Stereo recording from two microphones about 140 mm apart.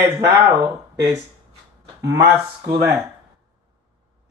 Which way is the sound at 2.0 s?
20° right (ahead or behind).